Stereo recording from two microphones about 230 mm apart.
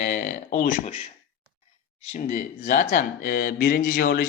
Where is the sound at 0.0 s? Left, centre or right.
Left.